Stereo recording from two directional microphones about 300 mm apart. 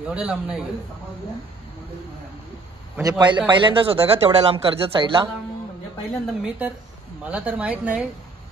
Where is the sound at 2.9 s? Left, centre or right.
Centre.